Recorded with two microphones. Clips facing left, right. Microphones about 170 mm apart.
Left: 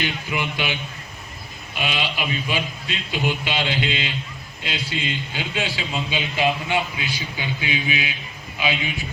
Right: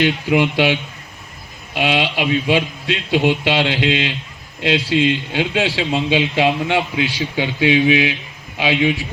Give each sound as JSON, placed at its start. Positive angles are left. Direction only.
{"t": 0.0, "sound": "a man's voice", "side_deg": -80}